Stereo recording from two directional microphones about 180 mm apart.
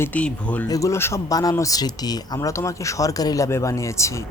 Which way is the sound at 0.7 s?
20° left (ahead or behind).